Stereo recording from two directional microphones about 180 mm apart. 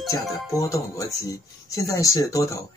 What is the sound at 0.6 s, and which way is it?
Speech, 20° left (ahead or behind).